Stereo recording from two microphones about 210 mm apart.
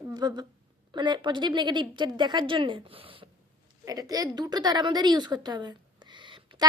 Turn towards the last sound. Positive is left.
turn(degrees=-20)  # may be behind; listen again after turning